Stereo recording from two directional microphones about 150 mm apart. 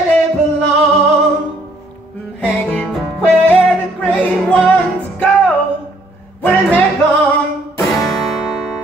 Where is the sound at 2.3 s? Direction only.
5° left (ahead or behind).